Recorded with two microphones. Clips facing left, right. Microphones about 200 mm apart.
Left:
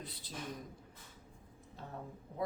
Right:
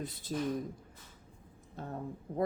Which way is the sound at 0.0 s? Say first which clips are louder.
Right 10 dB; 45° right (ahead or behind).